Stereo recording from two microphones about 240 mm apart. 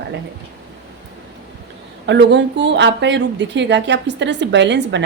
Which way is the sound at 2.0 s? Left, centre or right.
Right.